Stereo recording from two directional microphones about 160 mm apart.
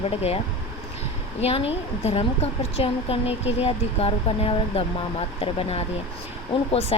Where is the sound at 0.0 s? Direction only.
40° left (ahead or behind).